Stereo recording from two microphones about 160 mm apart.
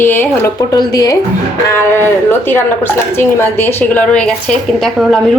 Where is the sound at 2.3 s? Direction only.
15° left (ahead or behind).